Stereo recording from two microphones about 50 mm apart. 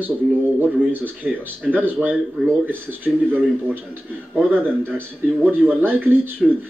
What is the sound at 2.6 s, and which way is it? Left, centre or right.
Speech, right.